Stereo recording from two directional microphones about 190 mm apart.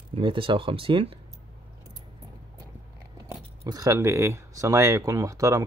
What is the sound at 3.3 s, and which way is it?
Speech, 20° right (ahead or behind).